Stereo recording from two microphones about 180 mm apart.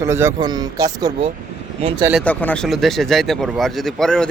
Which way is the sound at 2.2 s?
10° left (ahead or behind).